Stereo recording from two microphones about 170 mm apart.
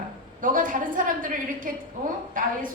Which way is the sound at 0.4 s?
50° right (ahead or behind).